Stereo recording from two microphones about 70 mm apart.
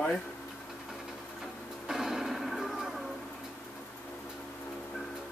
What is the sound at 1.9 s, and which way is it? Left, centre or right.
Music, centre.